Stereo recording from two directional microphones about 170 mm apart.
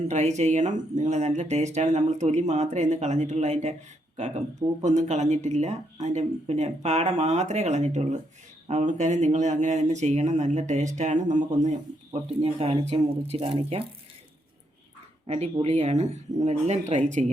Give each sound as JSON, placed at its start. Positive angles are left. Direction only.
{"t": 0.0, "sound": "speech", "side_deg": -40}
{"t": 15.3, "sound": "speech", "side_deg": -40}